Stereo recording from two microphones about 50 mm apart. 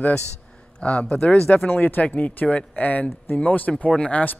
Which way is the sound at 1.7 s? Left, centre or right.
Left.